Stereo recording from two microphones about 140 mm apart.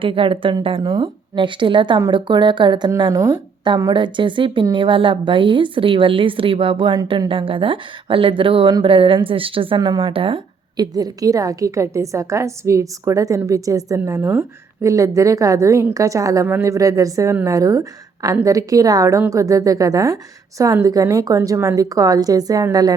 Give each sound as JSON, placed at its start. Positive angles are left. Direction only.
{"t": 0.0, "sound": "a woman's voice", "side_deg": -40}